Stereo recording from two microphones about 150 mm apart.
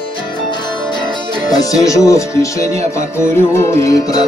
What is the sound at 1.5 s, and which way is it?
Music, 25° left (ahead or behind).